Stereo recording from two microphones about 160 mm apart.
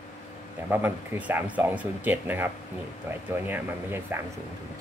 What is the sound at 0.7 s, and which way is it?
Speech, 15° right (ahead or behind).